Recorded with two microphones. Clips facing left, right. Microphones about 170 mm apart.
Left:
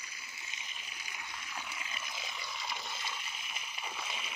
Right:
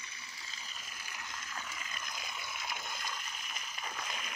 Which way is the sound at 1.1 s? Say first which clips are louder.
Even; 10° left (ahead or behind).